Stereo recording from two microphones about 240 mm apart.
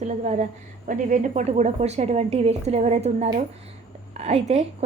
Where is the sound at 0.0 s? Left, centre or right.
Right.